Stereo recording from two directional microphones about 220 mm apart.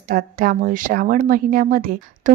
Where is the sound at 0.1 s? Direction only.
40° right (ahead or behind).